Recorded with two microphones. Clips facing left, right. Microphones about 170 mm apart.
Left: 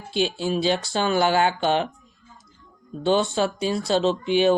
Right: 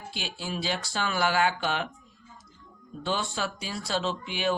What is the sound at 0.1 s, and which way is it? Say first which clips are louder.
Speech: left 13 dB; 25° left (ahead or behind).